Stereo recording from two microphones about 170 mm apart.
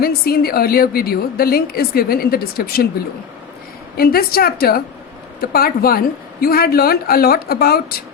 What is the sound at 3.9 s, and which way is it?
A woman's voice, 60° left (ahead or behind).